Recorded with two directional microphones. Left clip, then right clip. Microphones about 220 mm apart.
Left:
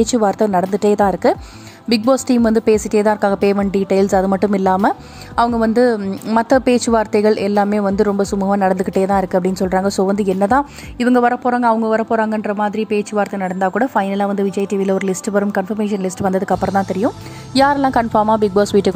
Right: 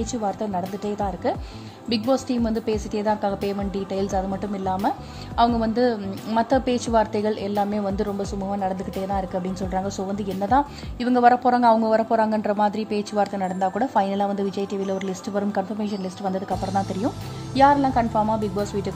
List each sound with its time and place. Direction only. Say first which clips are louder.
0.0 s a woman's voice: left 12 dB; 35° left (ahead or behind)
11.4 s a woman's voice: left 3 dB; 15° left (ahead or behind)
16.5 s speech: left 8 dB; centre (ahead or behind)
17.6 s a woman's voice: left 4 dB; 30° left (ahead or behind)